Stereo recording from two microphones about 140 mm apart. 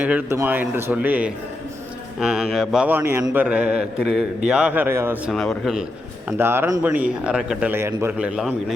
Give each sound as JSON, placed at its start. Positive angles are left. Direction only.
{"t": 0.0, "sound": "speech", "side_deg": -10}
{"t": 3.3, "sound": "speech", "side_deg": -10}
{"t": 5.3, "sound": "speech", "side_deg": 0}
{"t": 6.3, "sound": "speech", "side_deg": -15}
{"t": 7.7, "sound": "speech", "side_deg": -15}
{"t": 8.4, "sound": "speech", "side_deg": -5}